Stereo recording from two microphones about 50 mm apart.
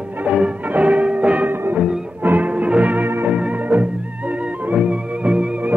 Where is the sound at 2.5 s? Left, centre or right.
Right.